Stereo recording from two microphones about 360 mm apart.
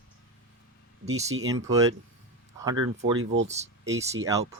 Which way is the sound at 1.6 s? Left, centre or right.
Centre.